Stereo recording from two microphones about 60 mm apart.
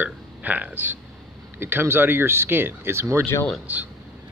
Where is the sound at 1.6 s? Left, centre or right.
Right.